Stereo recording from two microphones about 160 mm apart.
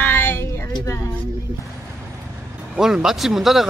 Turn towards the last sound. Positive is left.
turn(degrees=0)  # may be behind; listen again after turning